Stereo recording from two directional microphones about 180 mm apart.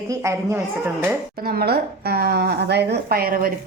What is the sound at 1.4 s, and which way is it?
A woman's voice, 60° right (ahead or behind).